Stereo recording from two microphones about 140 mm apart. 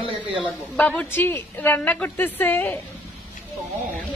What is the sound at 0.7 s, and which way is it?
A woman's voice, 10° left (ahead or behind).